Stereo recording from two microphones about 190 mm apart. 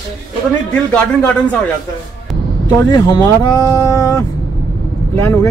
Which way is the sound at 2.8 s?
20° left (ahead or behind).